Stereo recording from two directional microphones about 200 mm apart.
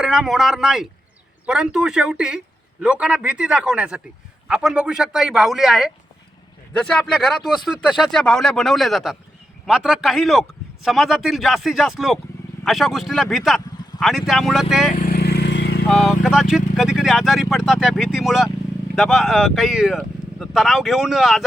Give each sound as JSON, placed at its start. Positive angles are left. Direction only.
{"t": 0.0, "sound": "speech", "side_deg": 0}
{"t": 14.9, "sound": "vehicle", "side_deg": 45}
{"t": 15.9, "sound": "speech", "side_deg": 0}